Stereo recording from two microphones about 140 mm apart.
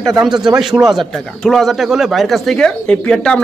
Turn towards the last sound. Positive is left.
turn(degrees=5)  # may be behind; listen again after turning